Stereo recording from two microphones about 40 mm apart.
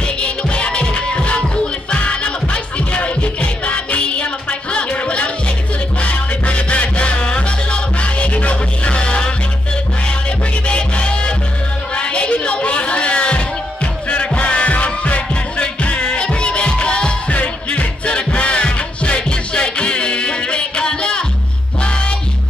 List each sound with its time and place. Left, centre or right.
0.0 s music: left
10.7 s music: left